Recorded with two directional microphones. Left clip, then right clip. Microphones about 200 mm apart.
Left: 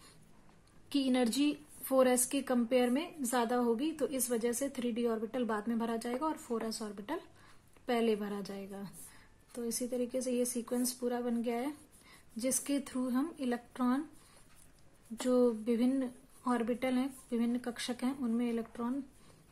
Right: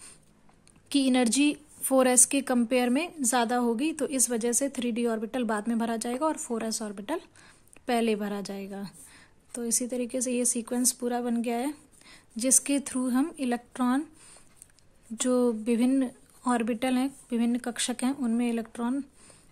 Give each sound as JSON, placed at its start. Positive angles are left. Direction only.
{"t": 0.8, "sound": "a woman's voice", "side_deg": -35}
{"t": 15.2, "sound": "a woman's voice", "side_deg": -35}